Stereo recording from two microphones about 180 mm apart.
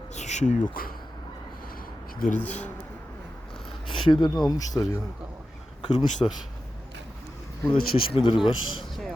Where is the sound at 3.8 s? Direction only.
25° left (ahead or behind).